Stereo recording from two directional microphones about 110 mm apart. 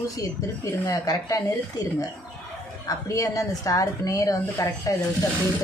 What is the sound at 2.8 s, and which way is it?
A woman's voice, 30° left (ahead or behind).